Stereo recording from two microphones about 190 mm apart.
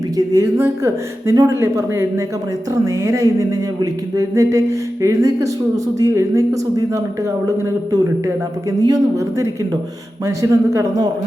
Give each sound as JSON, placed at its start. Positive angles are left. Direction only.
{"t": 0.2, "sound": "speech", "side_deg": -15}
{"t": 8.8, "sound": "speech", "side_deg": -15}